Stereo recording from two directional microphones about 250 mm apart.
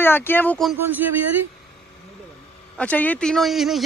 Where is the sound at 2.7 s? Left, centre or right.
Centre.